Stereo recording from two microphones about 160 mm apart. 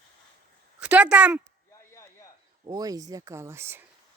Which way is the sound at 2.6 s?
25° right (ahead or behind).